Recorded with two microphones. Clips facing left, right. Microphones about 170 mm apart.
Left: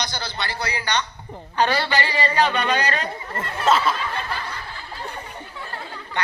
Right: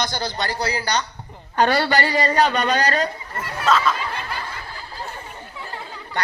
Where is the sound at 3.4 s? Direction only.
30° left (ahead or behind).